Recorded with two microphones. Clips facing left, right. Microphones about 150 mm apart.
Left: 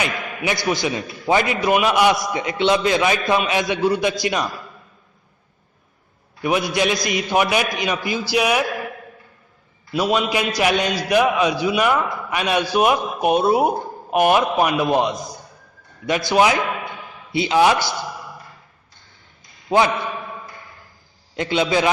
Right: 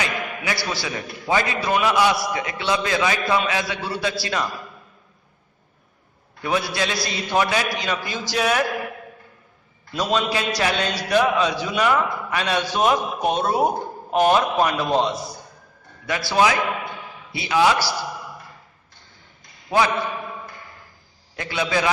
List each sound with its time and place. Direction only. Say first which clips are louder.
0.0 s a man's voice: left 3 dB; 20° left (ahead or behind)
6.4 s a man's voice: left 4 dB; 15° left (ahead or behind)
9.9 s a man's voice: left 3 dB; 10° left (ahead or behind)
19.7 s a man's voice: left 3 dB; 25° left (ahead or behind)
21.3 s a man's voice: left 5 dB; 20° left (ahead or behind)